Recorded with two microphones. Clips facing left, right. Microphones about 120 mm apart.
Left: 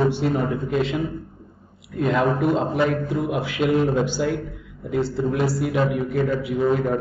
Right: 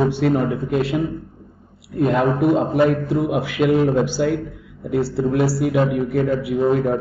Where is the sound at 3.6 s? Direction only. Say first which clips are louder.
Right 4 dB; 40° right (ahead or behind).